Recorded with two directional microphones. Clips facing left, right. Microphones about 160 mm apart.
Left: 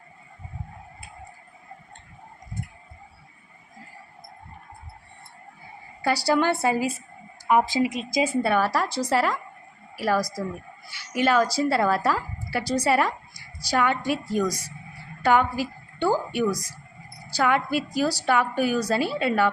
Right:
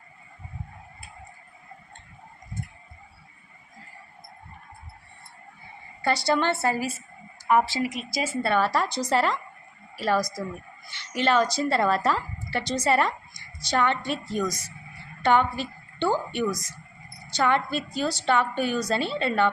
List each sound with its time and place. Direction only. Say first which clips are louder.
6.0 s a woman's voice: left 2 dB; 10° left (ahead or behind)